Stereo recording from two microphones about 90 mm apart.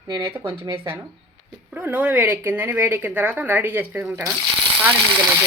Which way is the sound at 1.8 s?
20° right (ahead or behind).